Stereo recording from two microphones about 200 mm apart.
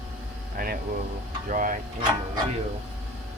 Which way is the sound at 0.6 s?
45° right (ahead or behind).